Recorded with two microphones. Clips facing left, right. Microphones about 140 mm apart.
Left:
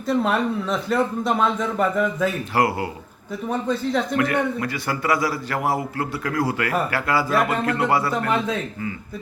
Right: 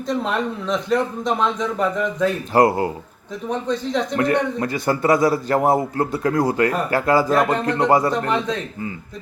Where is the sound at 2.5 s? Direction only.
40° right (ahead or behind).